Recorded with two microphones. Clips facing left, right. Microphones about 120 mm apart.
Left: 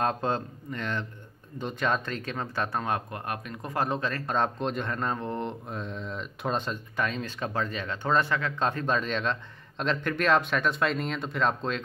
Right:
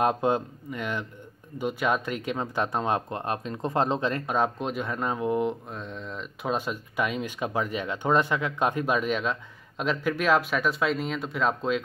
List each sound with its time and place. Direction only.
0.0 s speech: 15° right (ahead or behind)
4.3 s speech: 5° right (ahead or behind)